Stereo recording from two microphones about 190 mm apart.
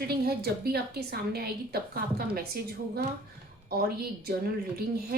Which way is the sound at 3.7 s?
55° right (ahead or behind).